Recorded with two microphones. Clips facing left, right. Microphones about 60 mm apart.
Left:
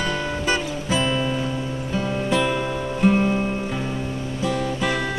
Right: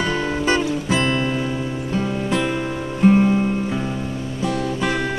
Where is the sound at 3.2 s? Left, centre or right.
Centre.